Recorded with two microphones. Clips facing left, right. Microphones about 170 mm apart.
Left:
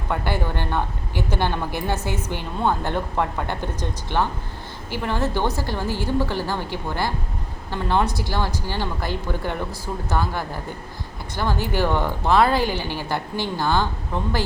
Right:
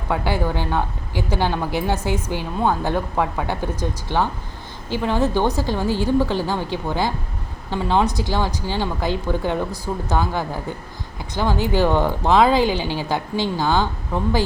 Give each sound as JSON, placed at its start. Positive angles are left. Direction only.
{"t": 0.1, "sound": "speech", "side_deg": -10}